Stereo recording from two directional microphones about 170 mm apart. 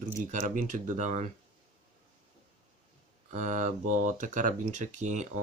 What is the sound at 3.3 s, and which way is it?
Speech, 45° right (ahead or behind).